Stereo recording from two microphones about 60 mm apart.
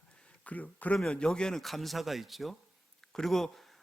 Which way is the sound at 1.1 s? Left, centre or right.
Centre.